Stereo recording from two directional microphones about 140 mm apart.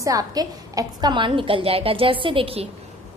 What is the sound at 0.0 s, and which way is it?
A woman's voice, 25° right (ahead or behind).